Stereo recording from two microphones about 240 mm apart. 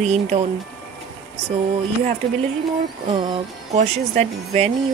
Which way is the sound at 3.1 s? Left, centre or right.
Right.